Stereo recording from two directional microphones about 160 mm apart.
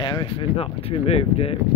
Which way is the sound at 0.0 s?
30° left (ahead or behind).